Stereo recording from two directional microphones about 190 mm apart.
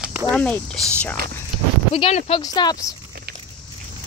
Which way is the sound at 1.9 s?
30° left (ahead or behind).